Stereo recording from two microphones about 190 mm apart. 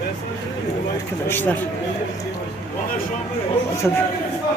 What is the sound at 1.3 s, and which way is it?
Speech, 10° left (ahead or behind).